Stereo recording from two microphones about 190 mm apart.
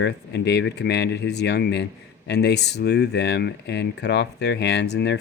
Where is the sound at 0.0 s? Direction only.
65° left (ahead or behind).